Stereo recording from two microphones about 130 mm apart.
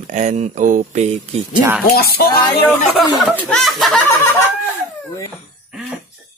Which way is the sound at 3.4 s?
5° left (ahead or behind).